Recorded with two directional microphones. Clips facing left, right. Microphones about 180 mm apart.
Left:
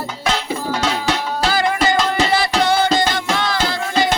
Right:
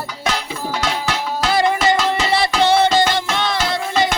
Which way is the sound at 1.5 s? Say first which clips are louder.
Right 2 dB; 25° right (ahead or behind).